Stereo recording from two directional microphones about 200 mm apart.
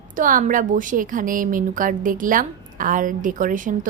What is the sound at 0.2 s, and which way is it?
A woman's voice, 40° right (ahead or behind).